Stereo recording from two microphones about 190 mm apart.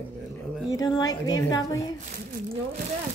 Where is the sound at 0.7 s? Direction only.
20° left (ahead or behind).